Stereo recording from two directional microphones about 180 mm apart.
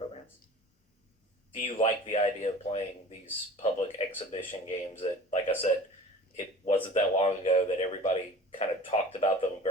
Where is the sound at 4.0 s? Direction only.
30° left (ahead or behind).